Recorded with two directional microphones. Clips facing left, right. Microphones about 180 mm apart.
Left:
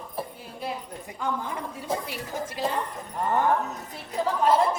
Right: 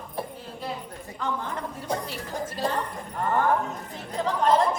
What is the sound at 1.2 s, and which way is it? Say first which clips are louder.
A woman's voice: even; 10° left (ahead or behind).